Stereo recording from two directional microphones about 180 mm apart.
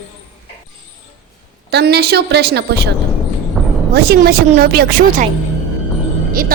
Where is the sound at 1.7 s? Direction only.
65° right (ahead or behind).